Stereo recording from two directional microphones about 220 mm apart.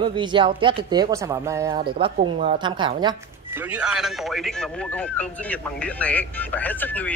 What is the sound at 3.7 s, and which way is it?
Speech, 5° right (ahead or behind).